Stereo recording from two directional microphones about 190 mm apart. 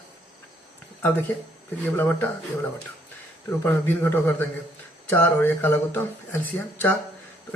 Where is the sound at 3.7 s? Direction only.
10° left (ahead or behind).